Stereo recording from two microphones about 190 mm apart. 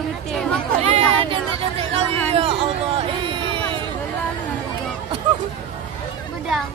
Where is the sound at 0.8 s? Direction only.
35° right (ahead or behind).